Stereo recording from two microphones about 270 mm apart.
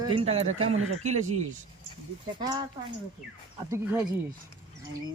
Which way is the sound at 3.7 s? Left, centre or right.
Centre.